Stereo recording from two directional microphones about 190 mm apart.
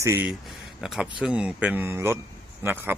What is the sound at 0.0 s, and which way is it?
Speech, 10° right (ahead or behind).